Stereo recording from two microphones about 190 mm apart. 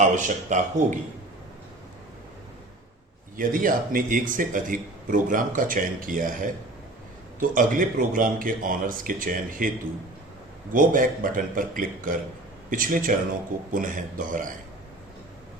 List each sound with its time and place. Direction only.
0.2 s speech: 40° right (ahead or behind)
3.3 s a man's voice: 45° right (ahead or behind)